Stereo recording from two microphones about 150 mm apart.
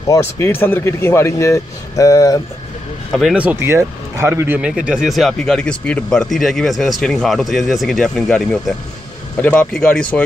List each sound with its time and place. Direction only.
0.1 s speech: 15° left (ahead or behind)
3.2 s speech: 5° right (ahead or behind)